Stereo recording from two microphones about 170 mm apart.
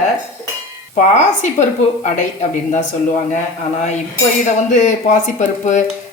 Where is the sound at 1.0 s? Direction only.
45° left (ahead or behind).